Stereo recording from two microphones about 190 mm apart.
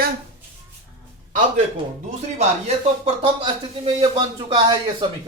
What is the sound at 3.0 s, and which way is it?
Speech, 25° right (ahead or behind).